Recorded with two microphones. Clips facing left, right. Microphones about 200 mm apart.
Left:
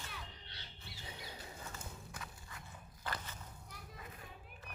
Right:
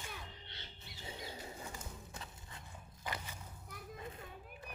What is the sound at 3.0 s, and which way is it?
Walk, 15° right (ahead or behind).